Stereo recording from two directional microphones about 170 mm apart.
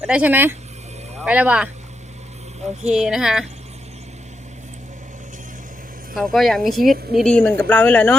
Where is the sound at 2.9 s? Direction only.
5° right (ahead or behind).